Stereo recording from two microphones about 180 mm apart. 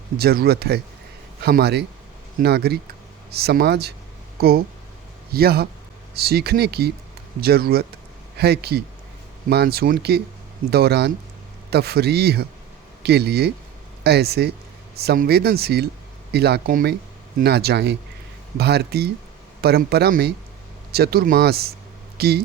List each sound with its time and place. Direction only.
0.2 s speech: 60° right (ahead or behind)